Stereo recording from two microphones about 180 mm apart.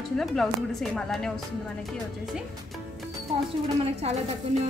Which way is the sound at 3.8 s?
35° right (ahead or behind).